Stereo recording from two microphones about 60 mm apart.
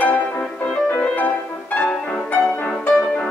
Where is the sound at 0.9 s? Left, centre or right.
Left.